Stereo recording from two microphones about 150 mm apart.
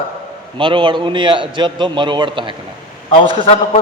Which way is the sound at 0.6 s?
35° right (ahead or behind).